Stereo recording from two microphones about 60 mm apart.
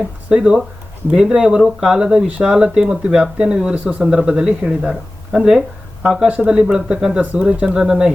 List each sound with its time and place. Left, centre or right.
0.3 s speech: centre